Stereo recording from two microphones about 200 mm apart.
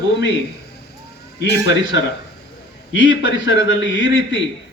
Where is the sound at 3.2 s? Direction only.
65° left (ahead or behind).